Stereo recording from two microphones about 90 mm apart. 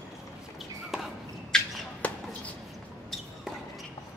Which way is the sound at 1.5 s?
5° left (ahead or behind).